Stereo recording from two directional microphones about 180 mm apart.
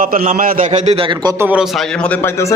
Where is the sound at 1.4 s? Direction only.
5° right (ahead or behind).